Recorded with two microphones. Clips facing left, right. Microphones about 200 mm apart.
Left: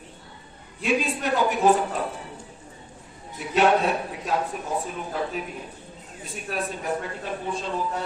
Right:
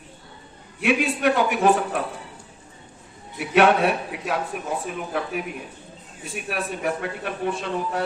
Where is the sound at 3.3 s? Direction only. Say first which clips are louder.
Right 3 dB; 65° right (ahead or behind).